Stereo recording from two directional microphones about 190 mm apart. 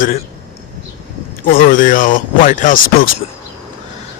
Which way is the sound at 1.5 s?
50° left (ahead or behind).